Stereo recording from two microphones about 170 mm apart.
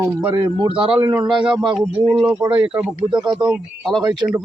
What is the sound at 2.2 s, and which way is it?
Speech, 30° right (ahead or behind).